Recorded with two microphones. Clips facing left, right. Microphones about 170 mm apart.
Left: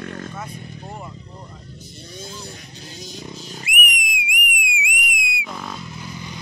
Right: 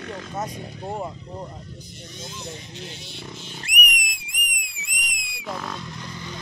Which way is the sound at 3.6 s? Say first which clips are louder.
Left 2 dB; 5° left (ahead or behind).